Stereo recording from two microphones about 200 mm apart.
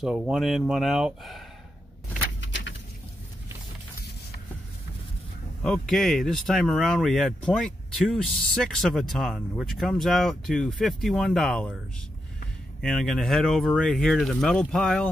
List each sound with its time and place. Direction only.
0.0 s speech: centre (ahead or behind)
2.4 s a sound: 65° left (ahead or behind)
5.6 s speech: centre (ahead or behind)
12.8 s speech: centre (ahead or behind)